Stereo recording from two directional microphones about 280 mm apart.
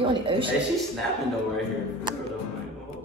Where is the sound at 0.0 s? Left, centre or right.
Centre.